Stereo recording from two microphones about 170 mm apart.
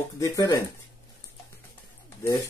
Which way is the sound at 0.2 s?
20° left (ahead or behind).